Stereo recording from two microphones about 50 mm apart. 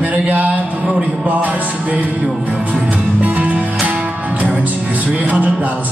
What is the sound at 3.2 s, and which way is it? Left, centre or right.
Music, right.